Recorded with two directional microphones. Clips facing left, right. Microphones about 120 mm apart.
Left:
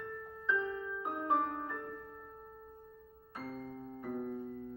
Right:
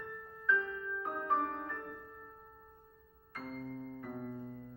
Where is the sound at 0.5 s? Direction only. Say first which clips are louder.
Even; 15° left (ahead or behind).